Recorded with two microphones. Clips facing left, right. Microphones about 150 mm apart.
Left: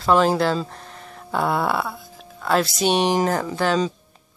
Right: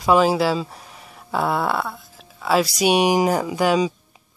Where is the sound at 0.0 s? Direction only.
5° right (ahead or behind).